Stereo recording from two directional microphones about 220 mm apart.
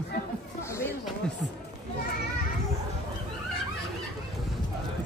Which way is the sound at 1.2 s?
5° left (ahead or behind).